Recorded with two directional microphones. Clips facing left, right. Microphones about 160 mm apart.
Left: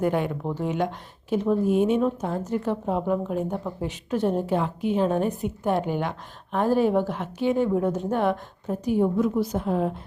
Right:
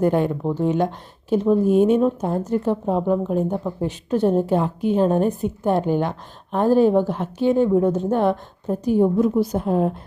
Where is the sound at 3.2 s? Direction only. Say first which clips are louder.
Right 5 dB; 30° right (ahead or behind).